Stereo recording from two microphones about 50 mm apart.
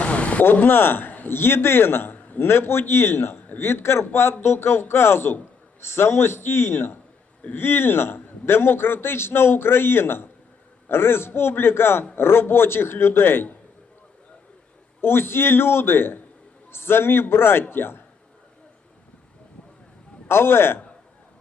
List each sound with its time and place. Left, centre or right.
0.0 s a sound: left
0.5 s a man's voice: left
15.0 s a man's voice: left
20.2 s a man's voice: left